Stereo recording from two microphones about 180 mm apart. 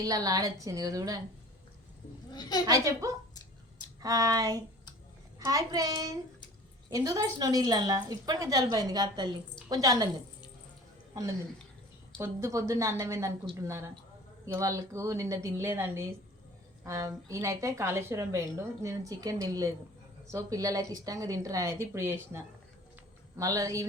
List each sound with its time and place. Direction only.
0.0 s a woman's voice: 20° right (ahead or behind)
2.3 s a woman's voice: 25° left (ahead or behind)
2.6 s a woman's voice: 20° right (ahead or behind)
12.2 s a woman's voice: 15° right (ahead or behind)